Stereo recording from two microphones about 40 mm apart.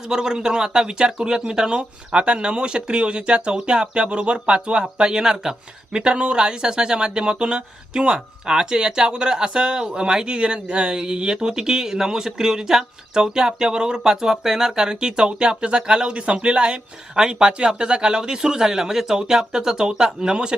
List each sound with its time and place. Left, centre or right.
0.1 s speech: centre